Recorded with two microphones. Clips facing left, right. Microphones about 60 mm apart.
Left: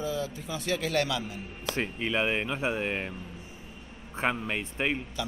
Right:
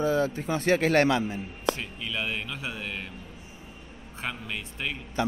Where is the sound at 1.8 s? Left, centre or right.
Left.